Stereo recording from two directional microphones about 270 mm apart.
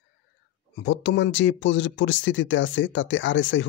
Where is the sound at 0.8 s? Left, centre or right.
Left.